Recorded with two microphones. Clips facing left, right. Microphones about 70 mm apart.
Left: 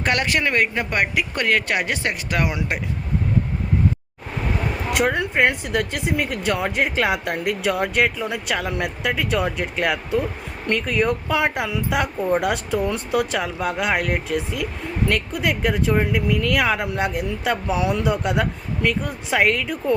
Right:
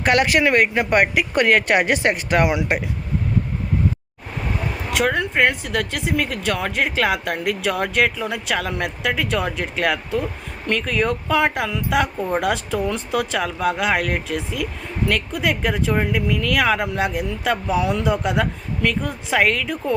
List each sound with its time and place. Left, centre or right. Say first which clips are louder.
0.0 s speech: right 4 dB; centre
4.9 s speech: right 1 dB; centre